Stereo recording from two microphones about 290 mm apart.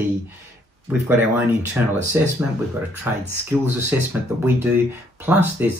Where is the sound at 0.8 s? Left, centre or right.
Centre.